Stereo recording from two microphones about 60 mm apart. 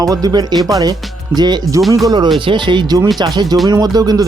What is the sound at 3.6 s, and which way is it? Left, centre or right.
Speech, right.